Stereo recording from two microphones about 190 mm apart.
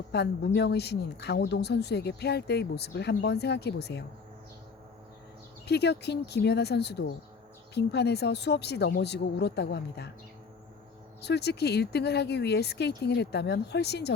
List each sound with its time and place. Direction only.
0.1 s speech: 60° left (ahead or behind)
5.6 s speech: 60° left (ahead or behind)
11.2 s speech: 60° left (ahead or behind)